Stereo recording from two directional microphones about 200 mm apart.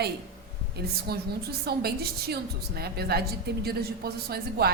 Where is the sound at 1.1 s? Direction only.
50° right (ahead or behind).